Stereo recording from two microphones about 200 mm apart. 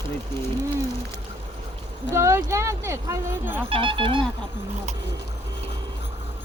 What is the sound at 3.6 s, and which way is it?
Speech, 25° right (ahead or behind).